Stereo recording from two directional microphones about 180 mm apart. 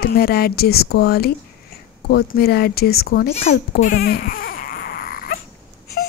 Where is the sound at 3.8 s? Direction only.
55° left (ahead or behind).